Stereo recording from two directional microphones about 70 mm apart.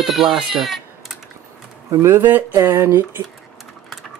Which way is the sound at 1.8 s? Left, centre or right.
Right.